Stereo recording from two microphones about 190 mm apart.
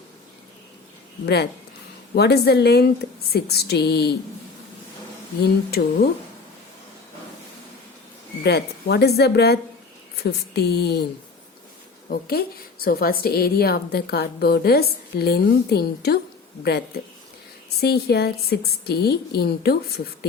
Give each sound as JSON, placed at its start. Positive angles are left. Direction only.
{"t": 1.2, "sound": "a woman's voice", "side_deg": 60}
{"t": 5.8, "sound": "speech", "side_deg": 55}
{"t": 8.4, "sound": "a woman's voice", "side_deg": 60}
{"t": 12.0, "sound": "a woman's voice", "side_deg": 50}